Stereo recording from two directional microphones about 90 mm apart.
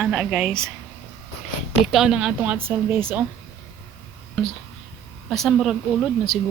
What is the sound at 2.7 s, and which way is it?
Speech, 25° right (ahead or behind).